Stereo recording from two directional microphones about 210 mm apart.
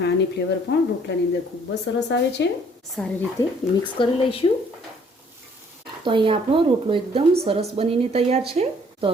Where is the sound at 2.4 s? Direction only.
55° left (ahead or behind).